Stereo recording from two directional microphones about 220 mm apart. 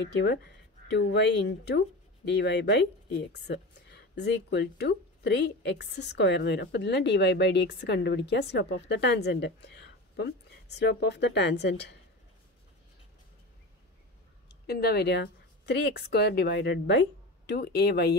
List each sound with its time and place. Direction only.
0.0 s a woman's voice: 50° left (ahead or behind)
14.7 s a woman's voice: 45° left (ahead or behind)